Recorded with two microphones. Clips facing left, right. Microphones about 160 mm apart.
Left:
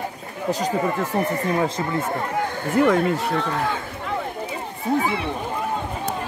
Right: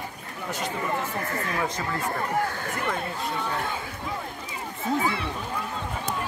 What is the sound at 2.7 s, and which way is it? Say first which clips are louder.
Speech: left 12 dB; 80° left.